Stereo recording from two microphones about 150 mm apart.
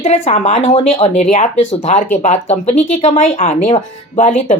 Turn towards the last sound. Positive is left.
turn(degrees=50)  # may be behind; listen again after turning